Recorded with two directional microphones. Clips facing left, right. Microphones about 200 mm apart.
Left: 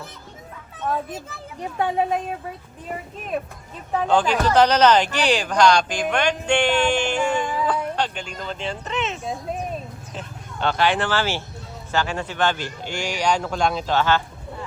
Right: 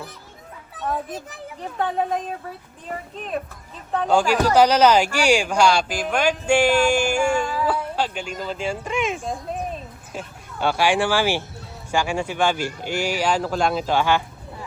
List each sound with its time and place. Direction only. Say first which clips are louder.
0.8 s a child's voice: left 1 dB; centre (ahead or behind)
1.5 s a child's voice: left 2 dB; 10° left (ahead or behind)
4.1 s speech: right 1 dB; 10° right (ahead or behind)